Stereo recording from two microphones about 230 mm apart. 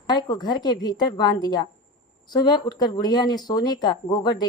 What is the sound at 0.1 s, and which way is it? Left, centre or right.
Speech, centre.